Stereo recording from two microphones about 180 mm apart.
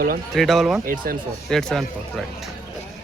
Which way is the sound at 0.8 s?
50° right (ahead or behind).